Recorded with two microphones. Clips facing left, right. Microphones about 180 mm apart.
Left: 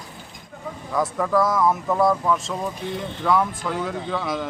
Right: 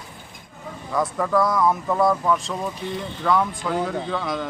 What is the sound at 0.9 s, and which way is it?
Speech, centre (ahead or behind).